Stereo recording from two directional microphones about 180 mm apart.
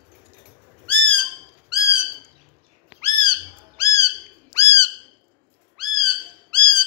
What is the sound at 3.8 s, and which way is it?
Bird, 15° left (ahead or behind).